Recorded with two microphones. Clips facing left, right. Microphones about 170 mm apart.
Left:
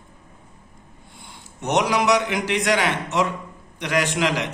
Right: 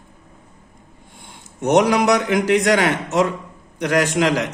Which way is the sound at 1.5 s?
50° right (ahead or behind).